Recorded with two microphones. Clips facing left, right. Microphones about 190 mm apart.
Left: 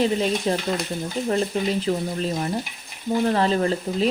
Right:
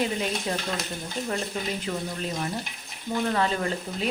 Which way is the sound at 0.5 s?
30° left (ahead or behind).